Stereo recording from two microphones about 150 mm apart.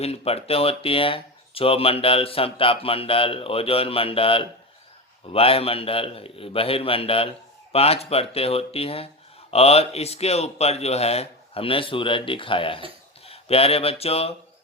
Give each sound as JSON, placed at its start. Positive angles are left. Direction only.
{"t": 0.0, "sound": "speech", "side_deg": 40}